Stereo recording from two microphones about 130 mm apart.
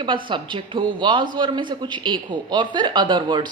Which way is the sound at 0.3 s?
40° right (ahead or behind).